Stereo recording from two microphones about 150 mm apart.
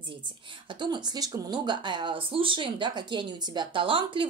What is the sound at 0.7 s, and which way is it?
A woman's voice, 30° right (ahead or behind).